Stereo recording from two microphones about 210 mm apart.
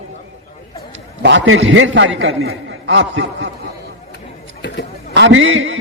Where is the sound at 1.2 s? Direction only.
60° right (ahead or behind).